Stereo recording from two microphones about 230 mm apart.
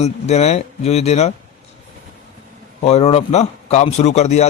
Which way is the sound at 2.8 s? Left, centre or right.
Left.